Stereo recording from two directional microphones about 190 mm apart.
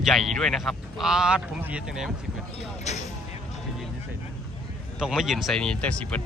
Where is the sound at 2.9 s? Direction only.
35° left (ahead or behind).